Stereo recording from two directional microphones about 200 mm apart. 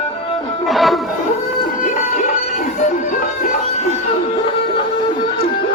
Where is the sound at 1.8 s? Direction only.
40° left (ahead or behind).